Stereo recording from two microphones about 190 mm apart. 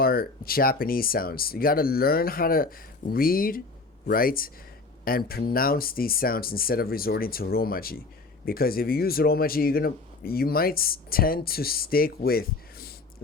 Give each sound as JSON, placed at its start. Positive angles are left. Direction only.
{"t": 0.0, "sound": "speech", "side_deg": 50}